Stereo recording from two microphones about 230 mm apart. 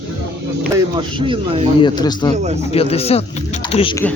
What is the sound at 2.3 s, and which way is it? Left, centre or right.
Speech, right.